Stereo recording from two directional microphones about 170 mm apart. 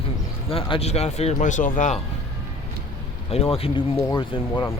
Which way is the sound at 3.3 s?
35° left (ahead or behind).